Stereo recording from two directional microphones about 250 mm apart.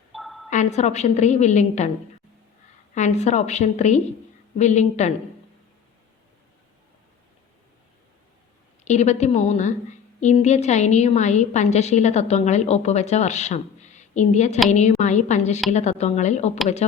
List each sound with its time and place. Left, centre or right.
0.1 s a sound: centre
0.5 s a woman's voice: left
2.9 s a woman's voice: left
8.8 s a woman's voice: left